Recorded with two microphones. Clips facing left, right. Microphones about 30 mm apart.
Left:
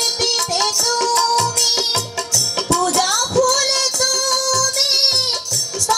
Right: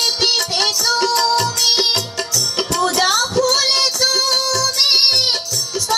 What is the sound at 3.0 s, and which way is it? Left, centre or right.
Music, right.